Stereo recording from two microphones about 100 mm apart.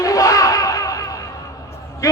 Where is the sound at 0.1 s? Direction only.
35° left (ahead or behind).